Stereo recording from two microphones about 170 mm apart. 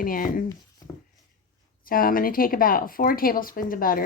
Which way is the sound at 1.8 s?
55° left (ahead or behind).